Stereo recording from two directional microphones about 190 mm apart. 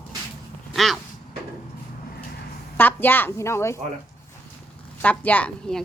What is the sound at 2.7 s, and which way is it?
A woman's voice, 10° left (ahead or behind).